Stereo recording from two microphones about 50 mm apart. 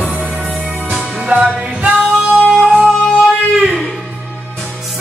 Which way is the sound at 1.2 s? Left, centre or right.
Right.